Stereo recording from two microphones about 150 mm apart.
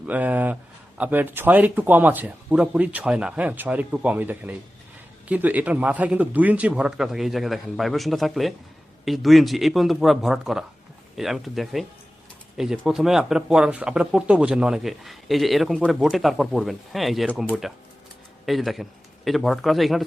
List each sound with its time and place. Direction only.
0.0 s speech: 10° right (ahead or behind)